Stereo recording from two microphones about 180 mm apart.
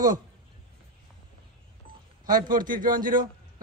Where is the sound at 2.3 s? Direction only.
50° right (ahead or behind).